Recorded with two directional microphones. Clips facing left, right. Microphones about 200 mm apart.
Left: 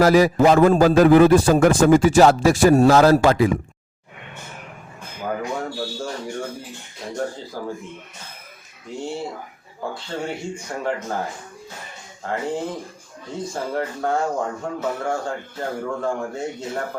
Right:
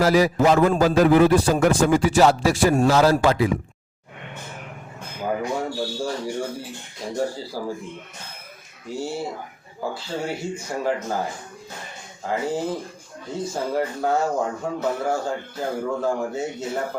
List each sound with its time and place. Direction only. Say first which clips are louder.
0.0 s a man's voice: left 3 dB; 50° left (ahead or behind)
5.2 s speech: right 1 dB; 10° right (ahead or behind)
7.5 s speech: right 1 dB; 5° right (ahead or behind)
9.0 s speech: even; 5° right (ahead or behind)